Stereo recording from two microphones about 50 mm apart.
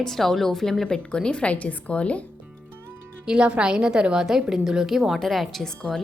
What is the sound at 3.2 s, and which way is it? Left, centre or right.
A woman's voice, centre.